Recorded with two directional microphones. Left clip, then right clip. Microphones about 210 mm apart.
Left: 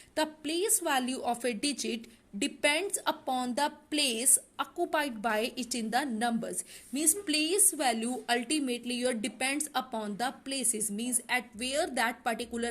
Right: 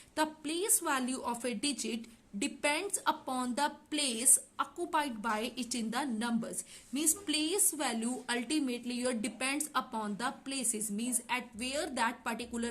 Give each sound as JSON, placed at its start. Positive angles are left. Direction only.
{"t": 0.2, "sound": "a woman's voice", "side_deg": 15}